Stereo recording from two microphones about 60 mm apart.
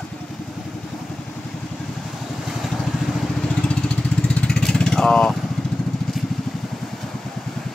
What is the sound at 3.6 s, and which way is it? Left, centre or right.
Vehicle, centre.